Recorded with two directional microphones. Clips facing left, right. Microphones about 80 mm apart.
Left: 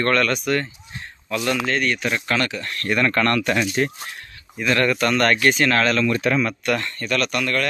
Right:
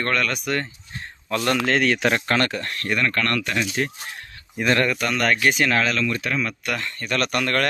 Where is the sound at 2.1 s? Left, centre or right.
Right.